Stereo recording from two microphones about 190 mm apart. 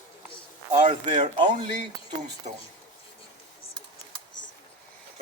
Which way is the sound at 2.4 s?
40° right (ahead or behind).